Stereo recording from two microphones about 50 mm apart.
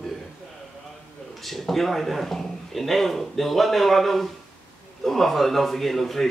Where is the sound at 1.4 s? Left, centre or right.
Centre.